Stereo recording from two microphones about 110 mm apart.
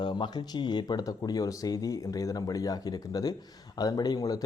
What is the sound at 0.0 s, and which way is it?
A man's voice, 45° left (ahead or behind).